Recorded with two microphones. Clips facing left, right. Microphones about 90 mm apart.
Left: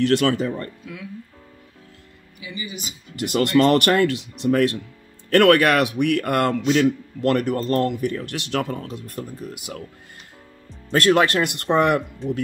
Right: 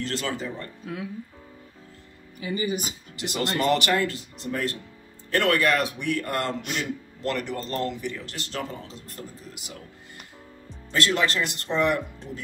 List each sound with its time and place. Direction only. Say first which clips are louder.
0.0 s speech: left 11 dB; 70° left (ahead or behind)
0.8 s speech: right 2 dB; 35° right (ahead or behind)
2.4 s speech: right 6 dB; 45° right (ahead or behind)
3.2 s speech: left 9 dB; 55° left (ahead or behind)
10.9 s speech: left 7 dB; 55° left (ahead or behind)